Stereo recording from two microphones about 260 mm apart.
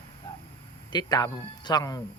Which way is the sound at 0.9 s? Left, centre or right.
Centre.